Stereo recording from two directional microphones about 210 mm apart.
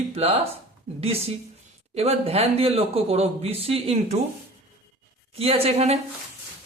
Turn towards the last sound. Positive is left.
turn(degrees=-30)  # may be behind; listen again after turning